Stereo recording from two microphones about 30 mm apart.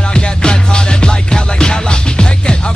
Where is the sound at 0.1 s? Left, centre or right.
Left.